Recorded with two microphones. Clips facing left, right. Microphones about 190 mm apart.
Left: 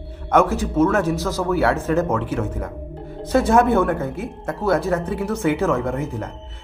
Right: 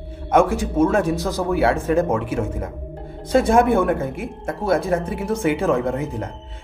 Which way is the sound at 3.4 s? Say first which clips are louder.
Left 1 dB; 15° right (ahead or behind).